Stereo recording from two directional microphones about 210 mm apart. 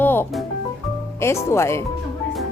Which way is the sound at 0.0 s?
10° left (ahead or behind).